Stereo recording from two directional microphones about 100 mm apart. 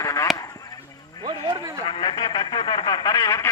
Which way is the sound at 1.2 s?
50° right (ahead or behind).